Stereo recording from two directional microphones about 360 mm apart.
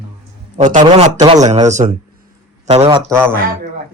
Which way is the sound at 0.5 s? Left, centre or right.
Centre.